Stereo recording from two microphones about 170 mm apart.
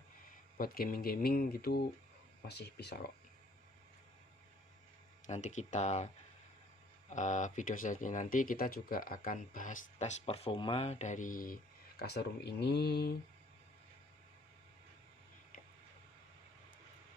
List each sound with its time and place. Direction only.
0.5 s speech: 60° left (ahead or behind)
2.5 s speech: 80° left
5.2 s speech: 45° left (ahead or behind)
7.1 s speech: 45° left (ahead or behind); by 13.1 s 70° left (ahead or behind)